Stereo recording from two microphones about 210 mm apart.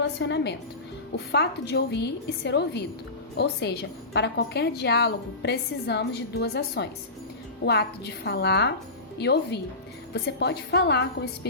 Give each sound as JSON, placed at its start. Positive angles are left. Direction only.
{"t": 0.0, "sound": "a woman's voice", "side_deg": 55}